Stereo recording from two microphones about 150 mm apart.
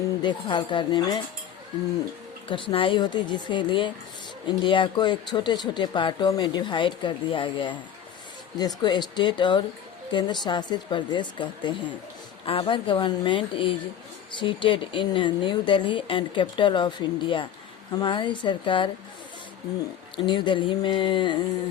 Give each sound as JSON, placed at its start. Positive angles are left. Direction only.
{"t": 0.2, "sound": "speech", "side_deg": 30}
{"t": 2.5, "sound": "speech", "side_deg": 35}
{"t": 20.1, "sound": "speech", "side_deg": 30}